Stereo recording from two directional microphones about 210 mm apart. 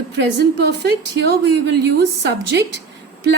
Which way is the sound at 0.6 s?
55° right (ahead or behind).